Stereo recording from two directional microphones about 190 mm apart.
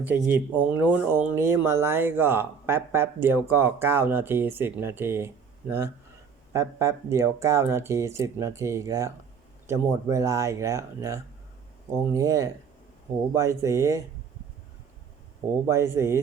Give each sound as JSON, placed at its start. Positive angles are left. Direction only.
{"t": 0.0, "sound": "speech", "side_deg": -10}
{"t": 15.6, "sound": "speech", "side_deg": -15}